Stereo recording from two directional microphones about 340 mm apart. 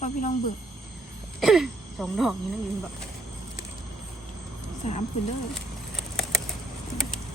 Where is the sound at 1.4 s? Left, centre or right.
Centre.